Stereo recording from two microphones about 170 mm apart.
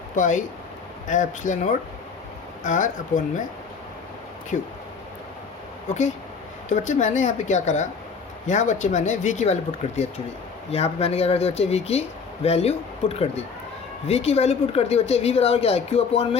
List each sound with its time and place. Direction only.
0.2 s speech: 45° left (ahead or behind)
4.5 s speech: 45° left (ahead or behind)
6.7 s speech: 45° left (ahead or behind)